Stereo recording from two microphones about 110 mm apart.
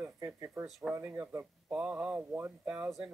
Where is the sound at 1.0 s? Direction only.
15° right (ahead or behind).